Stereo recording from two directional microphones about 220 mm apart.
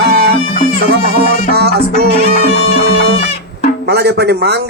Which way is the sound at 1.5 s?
45° right (ahead or behind).